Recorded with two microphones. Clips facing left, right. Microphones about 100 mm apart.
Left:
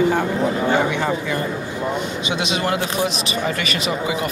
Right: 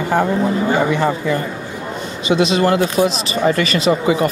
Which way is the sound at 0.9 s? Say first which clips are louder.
Right 4 dB; 40° right (ahead or behind).